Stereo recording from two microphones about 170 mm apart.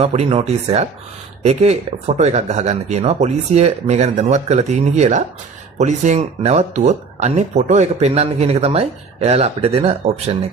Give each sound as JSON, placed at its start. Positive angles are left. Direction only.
{"t": 0.0, "sound": "speech", "side_deg": -35}